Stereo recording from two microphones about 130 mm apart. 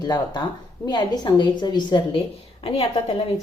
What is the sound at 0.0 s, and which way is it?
A woman's voice, 30° left (ahead or behind).